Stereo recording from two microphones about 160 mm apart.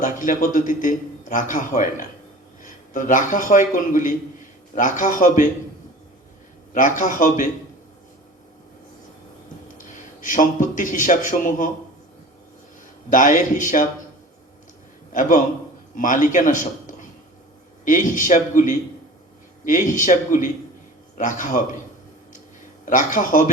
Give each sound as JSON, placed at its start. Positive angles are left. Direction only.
{"t": 0.0, "sound": "a man's voice", "side_deg": 55}
{"t": 6.7, "sound": "a man's voice", "side_deg": 55}
{"t": 9.7, "sound": "a man's voice", "side_deg": 55}
{"t": 13.1, "sound": "a man's voice", "side_deg": 55}
{"t": 15.1, "sound": "a man's voice", "side_deg": 55}
{"t": 22.9, "sound": "a man's voice", "side_deg": 55}